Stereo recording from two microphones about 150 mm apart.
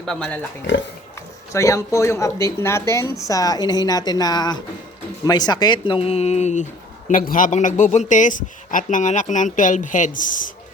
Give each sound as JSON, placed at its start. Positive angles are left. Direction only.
{"t": 0.0, "sound": "speech", "side_deg": 5}
{"t": 1.5, "sound": "speech", "side_deg": 20}
{"t": 7.1, "sound": "a man's voice", "side_deg": 65}